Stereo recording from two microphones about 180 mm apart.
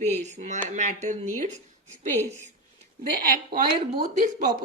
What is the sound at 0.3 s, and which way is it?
Speech, 40° right (ahead or behind).